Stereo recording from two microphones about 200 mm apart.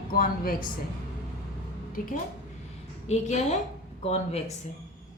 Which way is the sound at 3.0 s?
35° left (ahead or behind).